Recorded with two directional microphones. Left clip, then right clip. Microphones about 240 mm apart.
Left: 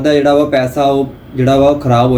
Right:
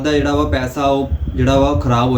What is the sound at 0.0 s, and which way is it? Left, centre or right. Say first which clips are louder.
A man's voice: left 6 dB; centre.